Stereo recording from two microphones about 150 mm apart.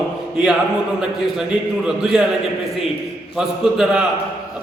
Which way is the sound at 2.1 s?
5° right (ahead or behind).